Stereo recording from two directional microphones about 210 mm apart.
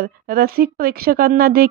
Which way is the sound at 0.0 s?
45° right (ahead or behind).